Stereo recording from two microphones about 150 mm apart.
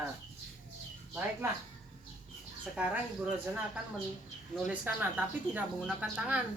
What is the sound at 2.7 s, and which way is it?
Speech, 10° right (ahead or behind).